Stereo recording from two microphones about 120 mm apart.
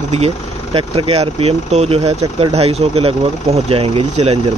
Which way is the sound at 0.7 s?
50° right (ahead or behind).